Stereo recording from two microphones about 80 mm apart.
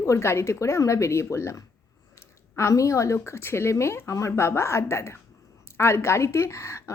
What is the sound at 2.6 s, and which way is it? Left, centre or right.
Speech, left.